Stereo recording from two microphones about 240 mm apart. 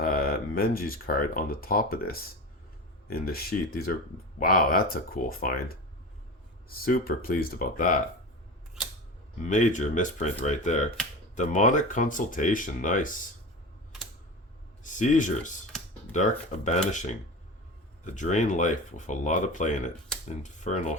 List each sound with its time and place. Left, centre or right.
0.0 s speech: left
9.4 s speech: left
14.8 s speech: left
20.4 s a sound: left